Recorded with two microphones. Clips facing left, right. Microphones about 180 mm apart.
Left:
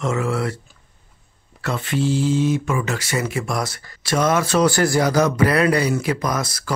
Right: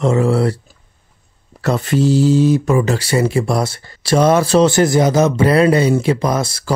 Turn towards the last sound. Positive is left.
turn(degrees=-30)  # may be behind; listen again after turning